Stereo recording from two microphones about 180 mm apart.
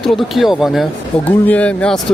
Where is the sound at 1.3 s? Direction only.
10° left (ahead or behind).